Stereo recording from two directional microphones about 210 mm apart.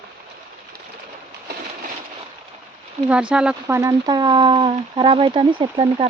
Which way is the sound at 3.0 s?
5° right (ahead or behind).